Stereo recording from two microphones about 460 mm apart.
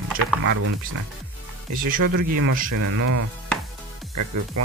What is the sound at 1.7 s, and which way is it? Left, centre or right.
Speech, centre.